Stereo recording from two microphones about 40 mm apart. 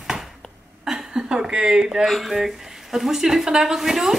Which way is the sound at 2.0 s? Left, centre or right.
Centre.